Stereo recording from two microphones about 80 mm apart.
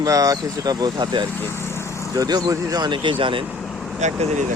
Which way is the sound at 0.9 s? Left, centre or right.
Right.